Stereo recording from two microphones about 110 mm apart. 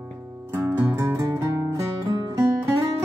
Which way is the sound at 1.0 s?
30° right (ahead or behind).